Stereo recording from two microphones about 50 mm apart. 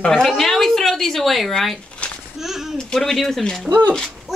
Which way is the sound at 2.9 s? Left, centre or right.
Centre.